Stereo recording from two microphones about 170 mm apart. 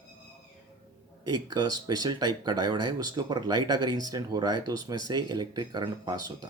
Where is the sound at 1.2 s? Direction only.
25° right (ahead or behind).